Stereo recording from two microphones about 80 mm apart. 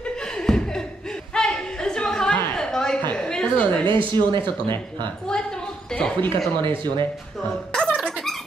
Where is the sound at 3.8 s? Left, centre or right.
Right.